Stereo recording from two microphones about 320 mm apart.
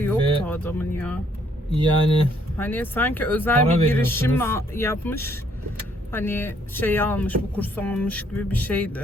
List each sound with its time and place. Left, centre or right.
0.4 s speech: centre
1.7 s speech: centre
2.6 s speech: centre